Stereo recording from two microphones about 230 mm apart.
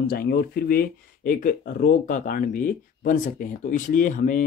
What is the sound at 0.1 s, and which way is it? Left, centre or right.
Speech, left.